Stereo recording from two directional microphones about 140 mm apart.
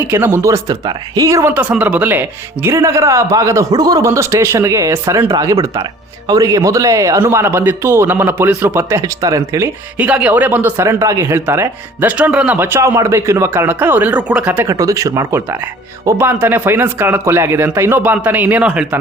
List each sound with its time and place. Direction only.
0.0 s speech: 15° right (ahead or behind)
10.0 s speech: 10° right (ahead or behind)
14.7 s speech: 25° right (ahead or behind)